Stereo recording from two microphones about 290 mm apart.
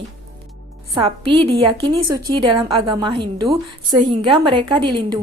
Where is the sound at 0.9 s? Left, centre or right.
Centre.